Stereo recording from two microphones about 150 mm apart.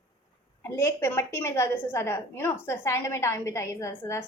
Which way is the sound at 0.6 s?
15° left (ahead or behind).